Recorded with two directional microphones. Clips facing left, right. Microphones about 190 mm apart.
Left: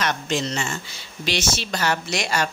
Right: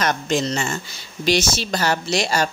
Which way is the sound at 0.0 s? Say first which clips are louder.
Right 4 dB; 40° right (ahead or behind).